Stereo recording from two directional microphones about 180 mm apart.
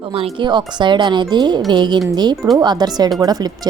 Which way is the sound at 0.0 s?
30° right (ahead or behind).